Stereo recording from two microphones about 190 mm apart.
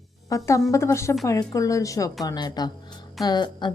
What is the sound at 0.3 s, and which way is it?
A woman's voice, 15° left (ahead or behind).